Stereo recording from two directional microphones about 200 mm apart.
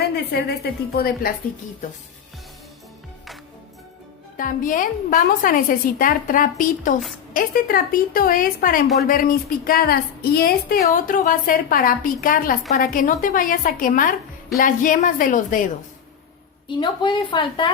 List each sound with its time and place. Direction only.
0.3 s a woman's voice: 55° left (ahead or behind)
4.4 s a woman's voice: 40° left (ahead or behind)
16.6 s a woman's voice: 20° left (ahead or behind)